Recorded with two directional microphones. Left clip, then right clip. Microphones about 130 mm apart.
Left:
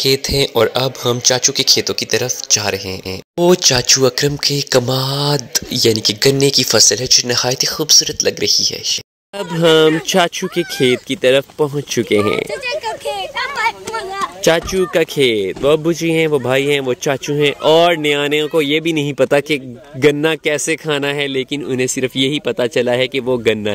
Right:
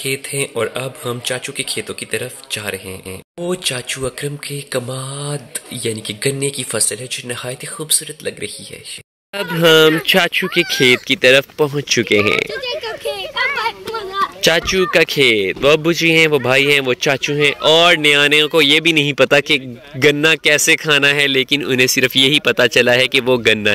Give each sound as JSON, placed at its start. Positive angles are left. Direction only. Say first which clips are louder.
{"t": 0.0, "sound": "speech", "louder": "left 7 dB", "side_deg": 40}
{"t": 9.6, "sound": "speech", "louder": "right 1 dB", "side_deg": 15}
{"t": 14.4, "sound": "speech", "louder": "left 1 dB", "side_deg": 10}
{"t": 17.3, "sound": "speech", "louder": "left 2 dB", "side_deg": 25}
{"t": 17.8, "sound": "speech", "louder": "right 3 dB", "side_deg": 10}